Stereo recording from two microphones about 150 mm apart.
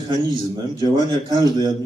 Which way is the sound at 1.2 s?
30° right (ahead or behind).